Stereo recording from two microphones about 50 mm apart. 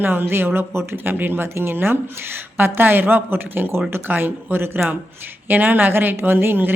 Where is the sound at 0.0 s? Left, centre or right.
Right.